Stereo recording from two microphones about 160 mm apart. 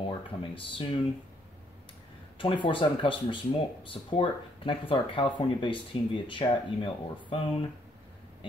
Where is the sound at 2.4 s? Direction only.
30° left (ahead or behind).